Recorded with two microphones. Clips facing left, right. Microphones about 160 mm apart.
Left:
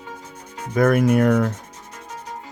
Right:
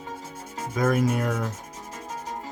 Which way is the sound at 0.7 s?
60° left (ahead or behind).